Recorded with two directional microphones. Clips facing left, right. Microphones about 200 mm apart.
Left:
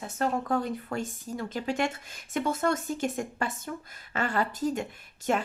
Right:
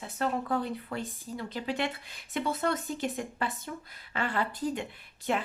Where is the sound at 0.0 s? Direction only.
45° left (ahead or behind).